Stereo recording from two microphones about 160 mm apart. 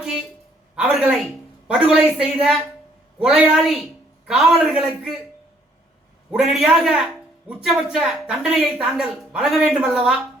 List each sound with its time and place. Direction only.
0.8 s a man's voice: centre (ahead or behind)
6.3 s a man's voice: centre (ahead or behind)